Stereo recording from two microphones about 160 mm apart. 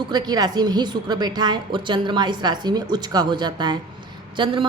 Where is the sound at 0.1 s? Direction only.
25° right (ahead or behind).